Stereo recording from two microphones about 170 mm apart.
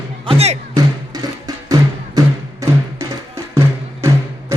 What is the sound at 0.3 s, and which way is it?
Music, 35° right (ahead or behind).